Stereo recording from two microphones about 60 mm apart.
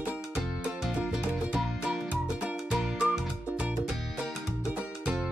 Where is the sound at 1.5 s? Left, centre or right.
Centre.